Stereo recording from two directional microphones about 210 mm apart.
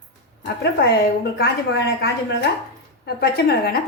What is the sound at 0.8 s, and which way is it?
Speech, 50° left (ahead or behind).